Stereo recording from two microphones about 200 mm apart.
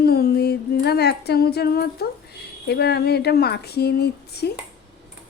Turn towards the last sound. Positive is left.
turn(degrees=55)  # may be behind; listen again after turning